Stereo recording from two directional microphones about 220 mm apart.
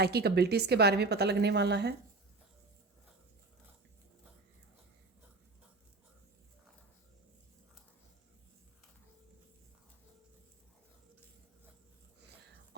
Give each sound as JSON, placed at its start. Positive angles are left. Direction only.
{"t": 0.0, "sound": "a woman's voice", "side_deg": -45}